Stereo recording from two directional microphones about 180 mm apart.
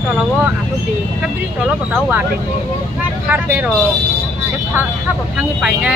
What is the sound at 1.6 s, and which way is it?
Speech, 5° right (ahead or behind).